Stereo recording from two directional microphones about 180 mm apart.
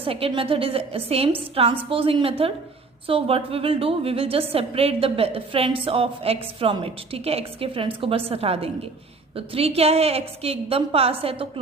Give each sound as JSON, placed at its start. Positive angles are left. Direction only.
{"t": 0.0, "sound": "a woman's voice", "side_deg": -30}